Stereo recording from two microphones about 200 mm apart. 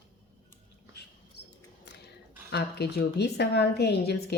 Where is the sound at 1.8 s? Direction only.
55° left (ahead or behind).